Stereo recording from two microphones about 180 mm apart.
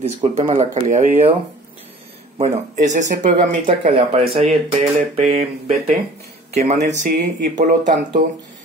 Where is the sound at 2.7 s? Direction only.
40° right (ahead or behind).